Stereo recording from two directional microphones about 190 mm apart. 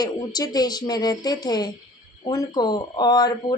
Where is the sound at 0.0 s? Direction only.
20° left (ahead or behind).